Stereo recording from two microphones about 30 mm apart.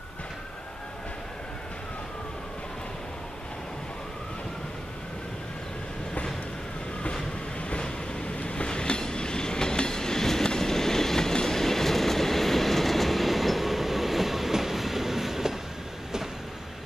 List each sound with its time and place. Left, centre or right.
7.8 s train: left; by 15.5 s centre